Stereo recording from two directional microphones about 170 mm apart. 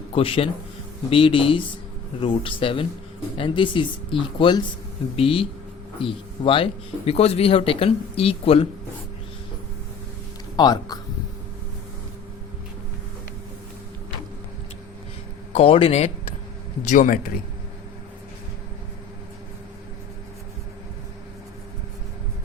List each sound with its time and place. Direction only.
0.1 s speech: 30° left (ahead or behind)
10.6 s speech: 25° left (ahead or behind)
15.5 s speech: 35° left (ahead or behind)
16.8 s a man's voice: 50° left (ahead or behind)